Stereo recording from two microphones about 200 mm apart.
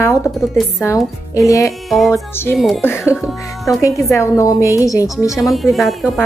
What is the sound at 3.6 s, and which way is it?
A woman's voice, 15° left (ahead or behind).